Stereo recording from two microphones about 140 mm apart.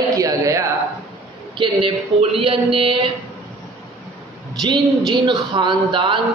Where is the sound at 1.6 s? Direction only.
40° right (ahead or behind).